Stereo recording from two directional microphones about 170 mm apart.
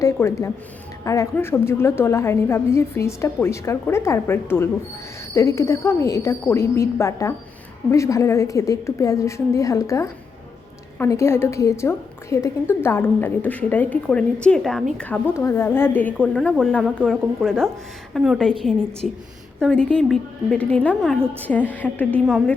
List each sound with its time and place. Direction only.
0.0 s a woman's voice: 15° left (ahead or behind)